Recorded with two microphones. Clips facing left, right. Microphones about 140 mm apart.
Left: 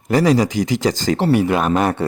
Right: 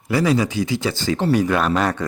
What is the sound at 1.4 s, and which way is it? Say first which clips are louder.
Speech: left 2 dB; 20° left (ahead or behind).